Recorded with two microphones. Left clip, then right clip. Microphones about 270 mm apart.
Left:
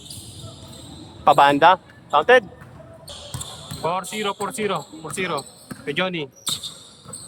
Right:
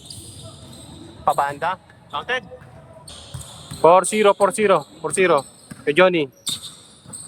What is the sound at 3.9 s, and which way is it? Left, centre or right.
Speech, centre.